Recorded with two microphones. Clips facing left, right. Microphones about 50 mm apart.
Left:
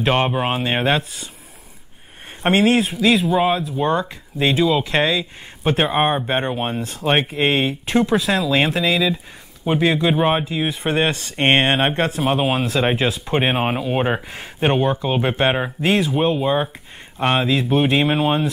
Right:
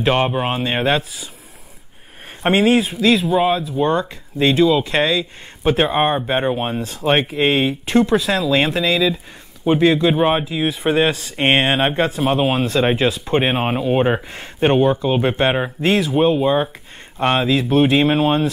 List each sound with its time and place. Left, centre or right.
0.0 s speech: centre
2.4 s speech: centre
5.6 s speech: centre
9.6 s speech: centre